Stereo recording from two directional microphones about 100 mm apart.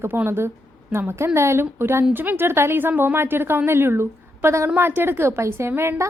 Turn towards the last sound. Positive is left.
turn(degrees=-30)  # may be behind; listen again after turning